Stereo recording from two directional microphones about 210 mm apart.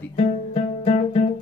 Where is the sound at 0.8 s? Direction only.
30° left (ahead or behind).